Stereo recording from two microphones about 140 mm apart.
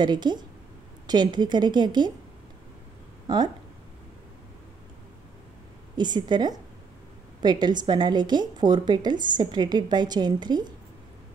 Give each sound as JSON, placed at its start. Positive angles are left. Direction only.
{"t": 0.0, "sound": "a woman's voice", "side_deg": -30}
{"t": 3.3, "sound": "speech", "side_deg": -30}
{"t": 5.9, "sound": "a woman's voice", "side_deg": -30}